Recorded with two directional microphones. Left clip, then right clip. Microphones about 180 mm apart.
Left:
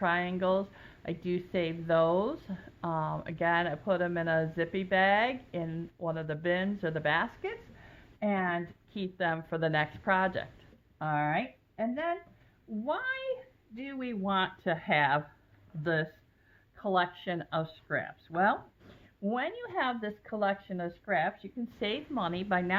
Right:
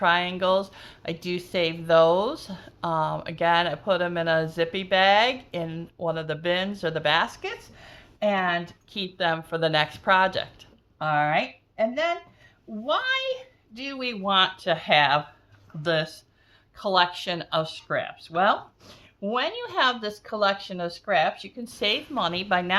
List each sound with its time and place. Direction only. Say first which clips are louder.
0.0 s speech: right 8 dB; 20° right (ahead or behind)